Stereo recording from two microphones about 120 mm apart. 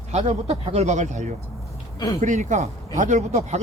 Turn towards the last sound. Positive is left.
turn(degrees=-75)  # may be behind; listen again after turning